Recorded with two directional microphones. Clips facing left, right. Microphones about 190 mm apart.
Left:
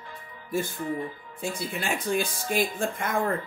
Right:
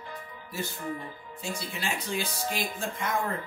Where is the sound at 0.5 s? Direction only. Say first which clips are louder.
Left 6 dB; 50° left (ahead or behind).